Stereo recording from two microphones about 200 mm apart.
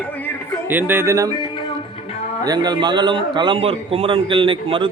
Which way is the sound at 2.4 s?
20° right (ahead or behind).